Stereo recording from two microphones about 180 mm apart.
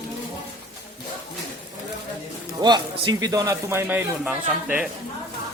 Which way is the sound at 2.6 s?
25° right (ahead or behind).